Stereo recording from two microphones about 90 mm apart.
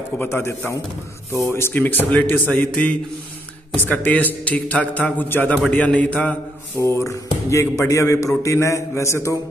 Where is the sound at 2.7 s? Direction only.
15° left (ahead or behind).